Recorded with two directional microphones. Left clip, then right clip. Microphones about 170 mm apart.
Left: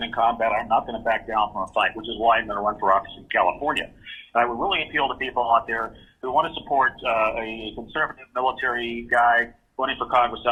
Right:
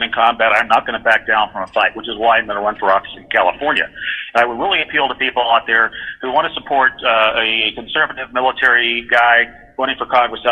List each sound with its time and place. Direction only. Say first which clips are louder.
0.0 s a man's voice: right 8 dB; 35° right (ahead or behind)